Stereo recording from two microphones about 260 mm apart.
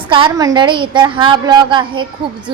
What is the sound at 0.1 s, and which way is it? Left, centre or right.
A woman's voice, centre.